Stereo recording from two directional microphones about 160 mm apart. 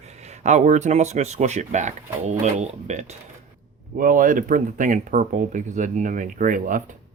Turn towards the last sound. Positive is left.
turn(degrees=-55)  # may be behind; listen again after turning